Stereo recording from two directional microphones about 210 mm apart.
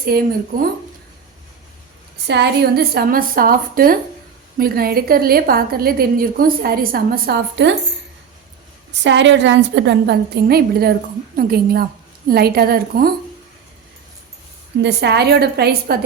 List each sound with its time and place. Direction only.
0.0 s a woman's voice: 45° right (ahead or behind)
2.2 s a woman's voice: 55° right (ahead or behind)
8.9 s a woman's voice: 60° right (ahead or behind)
14.8 s a woman's voice: 55° right (ahead or behind)